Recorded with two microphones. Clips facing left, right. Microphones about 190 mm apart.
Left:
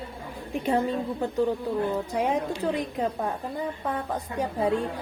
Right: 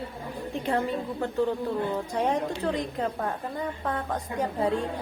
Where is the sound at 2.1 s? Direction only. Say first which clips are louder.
Even; 10° left (ahead or behind).